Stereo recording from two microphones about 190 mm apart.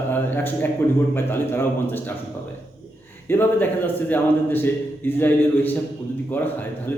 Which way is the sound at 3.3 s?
10° left (ahead or behind).